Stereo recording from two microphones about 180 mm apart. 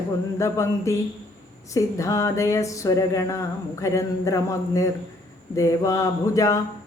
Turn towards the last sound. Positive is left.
turn(degrees=20)  # may be behind; listen again after turning